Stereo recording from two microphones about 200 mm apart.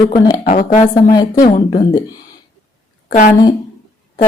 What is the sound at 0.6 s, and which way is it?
Speech, 40° left (ahead or behind).